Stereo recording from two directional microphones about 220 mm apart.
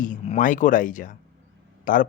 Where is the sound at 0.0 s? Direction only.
35° left (ahead or behind).